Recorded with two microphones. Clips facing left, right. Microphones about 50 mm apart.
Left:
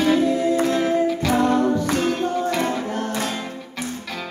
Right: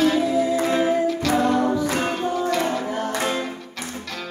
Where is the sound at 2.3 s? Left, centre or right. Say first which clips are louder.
Even; centre.